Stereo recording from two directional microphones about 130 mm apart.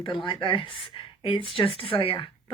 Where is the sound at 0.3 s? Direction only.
40° left (ahead or behind).